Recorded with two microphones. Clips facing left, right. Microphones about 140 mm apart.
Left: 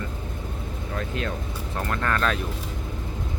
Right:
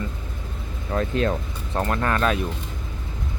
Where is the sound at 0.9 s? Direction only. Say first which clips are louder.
Right 8 dB; 35° right (ahead or behind).